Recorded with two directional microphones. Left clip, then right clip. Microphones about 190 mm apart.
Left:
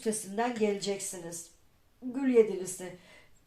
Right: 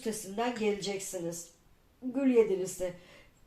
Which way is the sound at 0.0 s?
40° left (ahead or behind).